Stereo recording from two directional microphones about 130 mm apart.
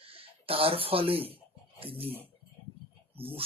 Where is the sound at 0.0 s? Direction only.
45° right (ahead or behind).